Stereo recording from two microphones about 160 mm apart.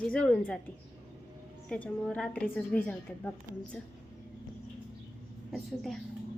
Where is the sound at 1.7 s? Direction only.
5° left (ahead or behind).